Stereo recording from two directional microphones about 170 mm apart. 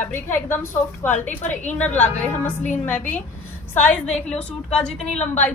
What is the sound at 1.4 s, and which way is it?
Speech, 45° left (ahead or behind).